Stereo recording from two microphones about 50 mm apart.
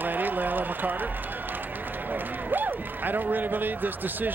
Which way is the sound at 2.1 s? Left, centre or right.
Right.